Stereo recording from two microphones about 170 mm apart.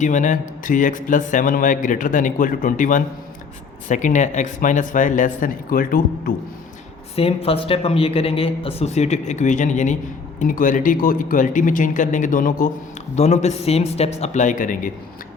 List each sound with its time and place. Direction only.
0.0 s speech: 45° left (ahead or behind)
7.2 s speech: 35° left (ahead or behind); by 14.8 s 50° left (ahead or behind)